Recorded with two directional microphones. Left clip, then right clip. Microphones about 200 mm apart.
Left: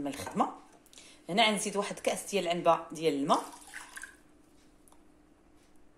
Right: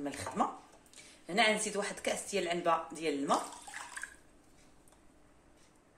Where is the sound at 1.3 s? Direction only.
25° left (ahead or behind).